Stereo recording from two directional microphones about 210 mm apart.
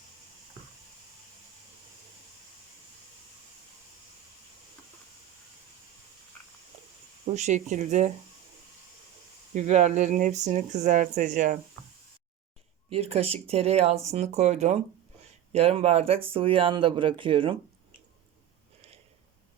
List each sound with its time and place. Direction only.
7.3 s speech: 35° right (ahead or behind)
9.6 s speech: 35° right (ahead or behind)
12.9 s speech: 30° right (ahead or behind)